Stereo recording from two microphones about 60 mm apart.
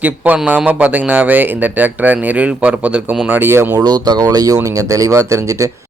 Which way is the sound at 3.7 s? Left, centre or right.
Right.